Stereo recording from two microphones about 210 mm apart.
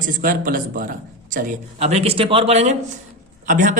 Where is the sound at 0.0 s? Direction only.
40° right (ahead or behind).